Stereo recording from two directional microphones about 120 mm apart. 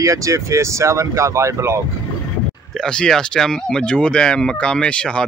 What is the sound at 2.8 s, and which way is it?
Speech, 5° left (ahead or behind).